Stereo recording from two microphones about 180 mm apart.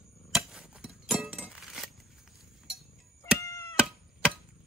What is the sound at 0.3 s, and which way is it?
Chink, centre (ahead or behind).